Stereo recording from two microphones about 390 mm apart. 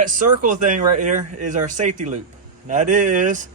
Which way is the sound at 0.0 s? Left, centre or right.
Centre.